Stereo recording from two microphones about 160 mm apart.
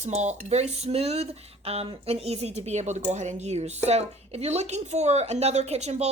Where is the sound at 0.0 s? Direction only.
45° right (ahead or behind).